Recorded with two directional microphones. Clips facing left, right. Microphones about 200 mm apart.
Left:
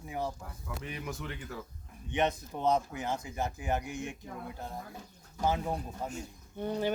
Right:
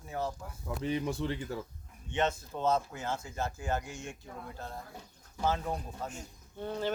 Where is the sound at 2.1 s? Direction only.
15° left (ahead or behind).